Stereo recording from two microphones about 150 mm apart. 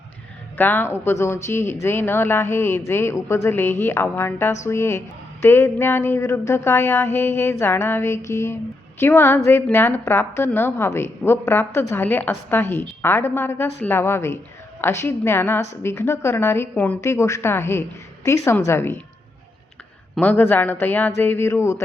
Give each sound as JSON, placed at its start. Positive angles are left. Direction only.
{"t": 0.5, "sound": "a woman's voice", "side_deg": 15}
{"t": 20.1, "sound": "a woman's voice", "side_deg": 10}